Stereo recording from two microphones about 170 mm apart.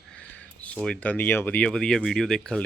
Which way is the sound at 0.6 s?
5° left (ahead or behind).